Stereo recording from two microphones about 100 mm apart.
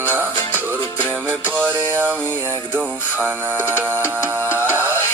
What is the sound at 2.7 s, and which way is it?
Speech, 15° right (ahead or behind).